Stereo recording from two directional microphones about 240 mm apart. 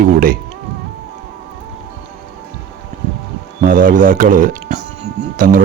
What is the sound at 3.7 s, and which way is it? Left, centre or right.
Speech, right.